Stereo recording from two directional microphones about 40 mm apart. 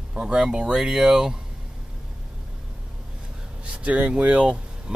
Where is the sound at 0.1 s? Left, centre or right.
Right.